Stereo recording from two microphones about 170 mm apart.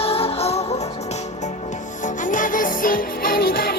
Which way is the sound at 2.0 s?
50° left (ahead or behind).